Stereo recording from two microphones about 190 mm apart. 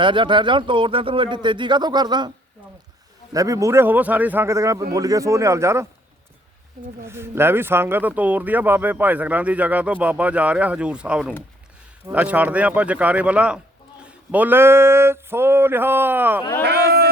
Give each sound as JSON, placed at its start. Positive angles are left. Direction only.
{"t": 0.0, "sound": "speech", "side_deg": -25}
{"t": 3.3, "sound": "speech", "side_deg": -15}
{"t": 7.0, "sound": "speech", "side_deg": -10}
{"t": 16.4, "sound": "speech", "side_deg": 15}
{"t": 16.6, "sound": "a sound", "side_deg": -60}